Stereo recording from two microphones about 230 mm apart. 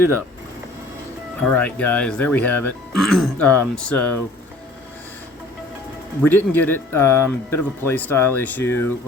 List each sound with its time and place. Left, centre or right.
1.5 s speech: centre
6.2 s speech: centre